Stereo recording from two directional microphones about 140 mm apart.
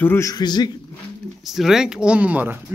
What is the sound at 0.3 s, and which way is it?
Speech, 30° left (ahead or behind).